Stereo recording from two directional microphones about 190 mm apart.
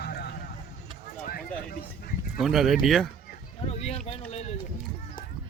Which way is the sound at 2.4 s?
Centre (ahead or behind).